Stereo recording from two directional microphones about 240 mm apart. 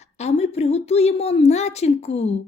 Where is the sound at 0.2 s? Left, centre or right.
Left.